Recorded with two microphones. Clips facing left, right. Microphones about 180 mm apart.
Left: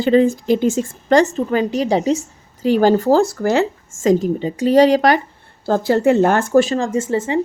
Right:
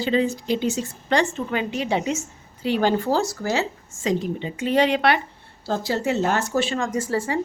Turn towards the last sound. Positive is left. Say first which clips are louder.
# left 5 dB
turn(degrees=20)  # may be behind; listen again after turning